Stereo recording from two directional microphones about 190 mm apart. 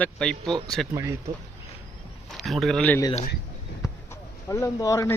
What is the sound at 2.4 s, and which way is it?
Speech, centre (ahead or behind).